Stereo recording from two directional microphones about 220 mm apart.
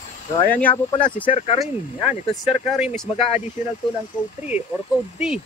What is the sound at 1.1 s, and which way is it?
Speech, 25° left (ahead or behind).